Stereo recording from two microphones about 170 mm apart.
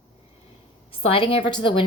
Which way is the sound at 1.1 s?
30° left (ahead or behind).